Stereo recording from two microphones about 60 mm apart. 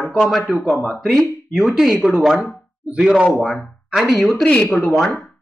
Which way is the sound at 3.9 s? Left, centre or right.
Centre.